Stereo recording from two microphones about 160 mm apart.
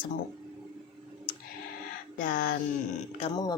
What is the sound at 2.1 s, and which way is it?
Speech, 60° left (ahead or behind).